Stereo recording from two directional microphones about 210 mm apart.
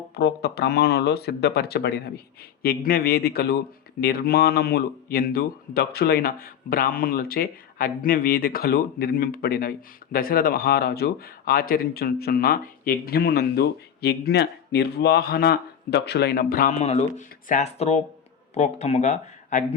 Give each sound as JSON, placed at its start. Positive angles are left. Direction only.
{"t": 0.1, "sound": "speech", "side_deg": 50}